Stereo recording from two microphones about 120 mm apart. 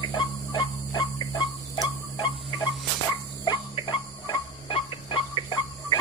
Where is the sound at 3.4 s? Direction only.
40° left (ahead or behind).